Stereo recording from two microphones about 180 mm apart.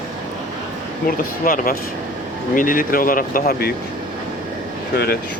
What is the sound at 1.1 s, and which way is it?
Speech, 50° left (ahead or behind).